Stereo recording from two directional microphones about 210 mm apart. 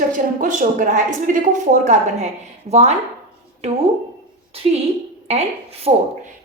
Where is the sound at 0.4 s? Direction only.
40° right (ahead or behind).